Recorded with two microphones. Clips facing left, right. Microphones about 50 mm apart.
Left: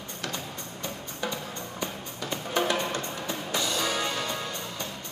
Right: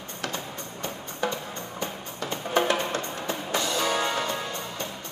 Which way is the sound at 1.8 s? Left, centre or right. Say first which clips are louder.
Right 2 dB; right.